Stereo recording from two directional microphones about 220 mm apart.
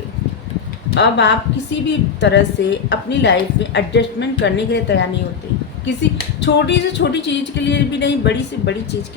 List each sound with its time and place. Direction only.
0.9 s a woman's voice: 50° left (ahead or behind)